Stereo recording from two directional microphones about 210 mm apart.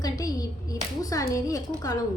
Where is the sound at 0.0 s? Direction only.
15° left (ahead or behind).